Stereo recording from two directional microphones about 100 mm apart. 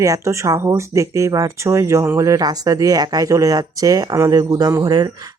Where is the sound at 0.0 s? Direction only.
30° right (ahead or behind).